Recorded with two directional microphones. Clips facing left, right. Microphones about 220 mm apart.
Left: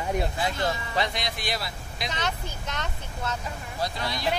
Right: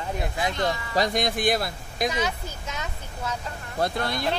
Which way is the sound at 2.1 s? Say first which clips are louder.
Right 4 dB; 10° right (ahead or behind).